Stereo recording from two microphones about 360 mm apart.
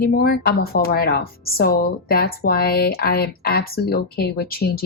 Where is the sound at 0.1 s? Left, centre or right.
Left.